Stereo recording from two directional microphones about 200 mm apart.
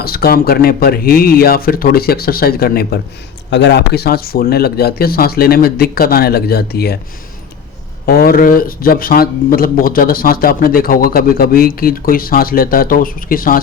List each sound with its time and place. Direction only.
0.0 s speech: 50° left (ahead or behind)
8.0 s speech: 50° left (ahead or behind)